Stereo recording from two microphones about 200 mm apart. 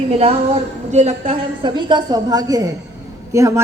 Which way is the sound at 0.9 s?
35° right (ahead or behind).